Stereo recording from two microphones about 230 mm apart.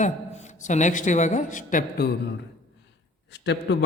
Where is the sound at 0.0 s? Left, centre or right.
Left.